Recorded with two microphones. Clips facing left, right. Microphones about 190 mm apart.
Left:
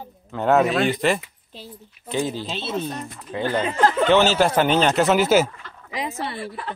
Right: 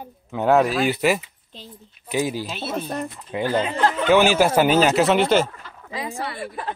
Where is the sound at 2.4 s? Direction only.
25° left (ahead or behind).